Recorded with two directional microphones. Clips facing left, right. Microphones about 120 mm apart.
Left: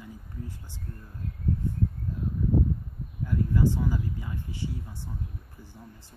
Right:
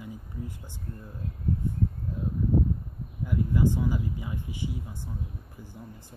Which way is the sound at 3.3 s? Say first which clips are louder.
Even; 15° right (ahead or behind).